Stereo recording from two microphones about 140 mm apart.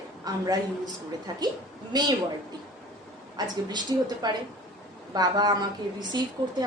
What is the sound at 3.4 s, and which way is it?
Speech, 30° right (ahead or behind).